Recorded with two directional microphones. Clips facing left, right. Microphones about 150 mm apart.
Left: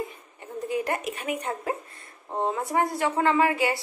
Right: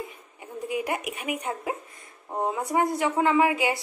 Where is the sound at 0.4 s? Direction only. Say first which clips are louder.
Left 1 dB; 10° right (ahead or behind).